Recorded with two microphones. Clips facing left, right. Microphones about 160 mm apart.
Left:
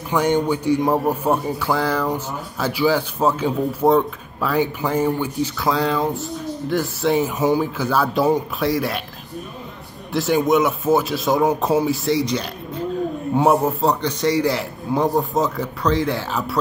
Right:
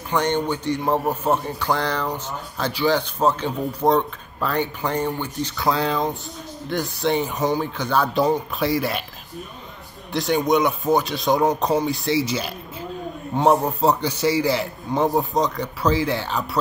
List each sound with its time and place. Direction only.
0.1 s a man's voice: 10° left (ahead or behind)
10.1 s speech: 5° left (ahead or behind)